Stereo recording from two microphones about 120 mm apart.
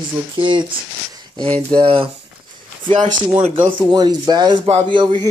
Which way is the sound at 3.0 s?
90° right.